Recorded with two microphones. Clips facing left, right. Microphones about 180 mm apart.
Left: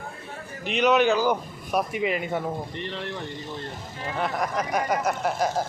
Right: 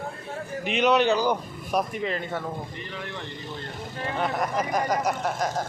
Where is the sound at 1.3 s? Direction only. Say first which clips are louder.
Left 1 dB; 5° left (ahead or behind).